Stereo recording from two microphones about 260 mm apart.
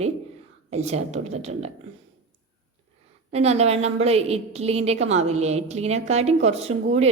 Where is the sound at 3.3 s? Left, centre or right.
Right.